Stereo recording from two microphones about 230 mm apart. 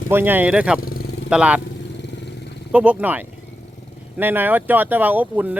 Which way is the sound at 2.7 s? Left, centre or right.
Centre.